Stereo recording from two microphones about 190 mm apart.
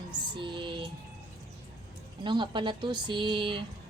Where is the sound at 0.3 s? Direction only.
25° right (ahead or behind).